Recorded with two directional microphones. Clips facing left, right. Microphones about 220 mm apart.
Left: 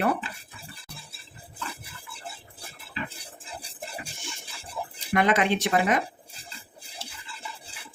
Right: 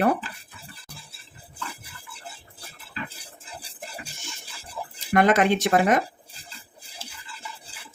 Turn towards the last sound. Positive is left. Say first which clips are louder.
# right 4 dB
turn(degrees=-45)  # may be behind; listen again after turning